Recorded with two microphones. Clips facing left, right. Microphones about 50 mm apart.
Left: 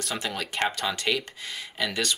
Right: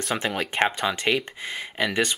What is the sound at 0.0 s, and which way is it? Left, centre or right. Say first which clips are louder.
Speech: right 5 dB; right.